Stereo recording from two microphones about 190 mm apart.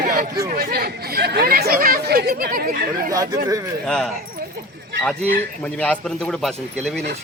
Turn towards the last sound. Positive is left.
turn(degrees=0)  # may be behind; listen again after turning